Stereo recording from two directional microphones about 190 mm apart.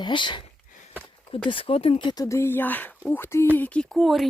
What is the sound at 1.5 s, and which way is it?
Speech, 30° left (ahead or behind).